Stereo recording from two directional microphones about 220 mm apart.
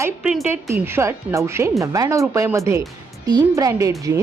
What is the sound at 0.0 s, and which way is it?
Speech, 5° right (ahead or behind).